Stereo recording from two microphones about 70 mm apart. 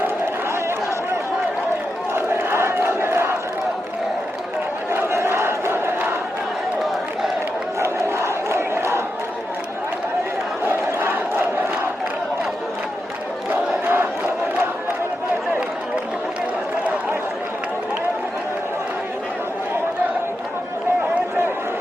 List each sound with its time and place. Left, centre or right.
2.1 s crowd: right
4.9 s crowd: right
7.8 s crowd: right
10.7 s crowd: right
13.5 s crowd: right